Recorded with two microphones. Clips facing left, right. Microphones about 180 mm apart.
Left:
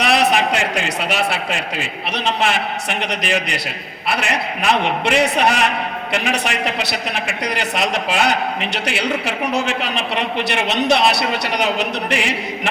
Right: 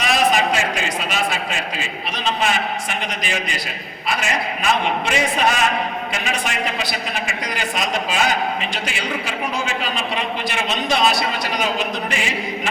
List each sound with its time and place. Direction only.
0.0 s a man's voice: 70° left (ahead or behind)